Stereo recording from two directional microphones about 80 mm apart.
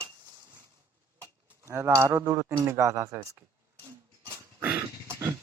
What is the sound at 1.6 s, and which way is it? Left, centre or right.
Speech, right.